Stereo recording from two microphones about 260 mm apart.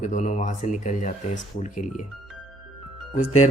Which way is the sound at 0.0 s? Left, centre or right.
Left.